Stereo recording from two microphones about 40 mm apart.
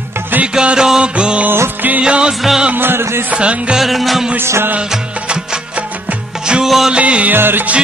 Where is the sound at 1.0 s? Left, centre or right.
Right.